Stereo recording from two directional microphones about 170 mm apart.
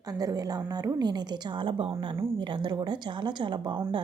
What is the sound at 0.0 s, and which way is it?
Speech, 20° right (ahead or behind).